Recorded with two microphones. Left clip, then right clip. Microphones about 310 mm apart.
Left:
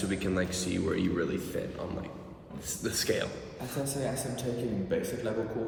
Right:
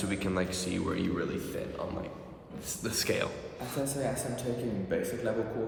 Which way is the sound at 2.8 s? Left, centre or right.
Centre.